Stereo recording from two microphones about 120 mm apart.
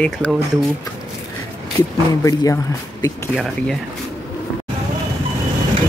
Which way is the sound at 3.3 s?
Centre (ahead or behind).